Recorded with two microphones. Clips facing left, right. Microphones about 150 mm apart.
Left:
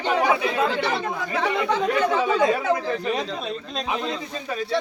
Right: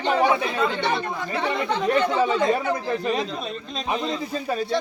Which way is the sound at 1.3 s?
90° left.